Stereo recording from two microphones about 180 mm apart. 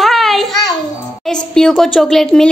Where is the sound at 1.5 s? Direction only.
5° left (ahead or behind).